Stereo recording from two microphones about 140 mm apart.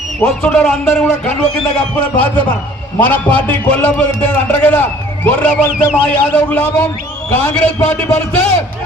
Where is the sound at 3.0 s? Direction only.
10° left (ahead or behind).